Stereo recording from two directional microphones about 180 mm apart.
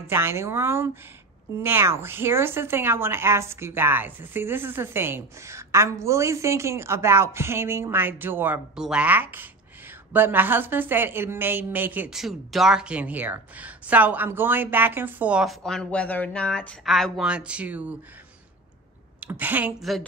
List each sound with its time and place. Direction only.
0.1 s a woman's voice: 15° right (ahead or behind)
19.1 s speech: 10° right (ahead or behind)